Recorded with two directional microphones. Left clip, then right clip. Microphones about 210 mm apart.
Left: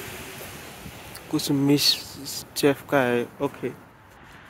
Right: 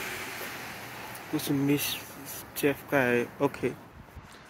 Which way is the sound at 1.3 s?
30° left (ahead or behind).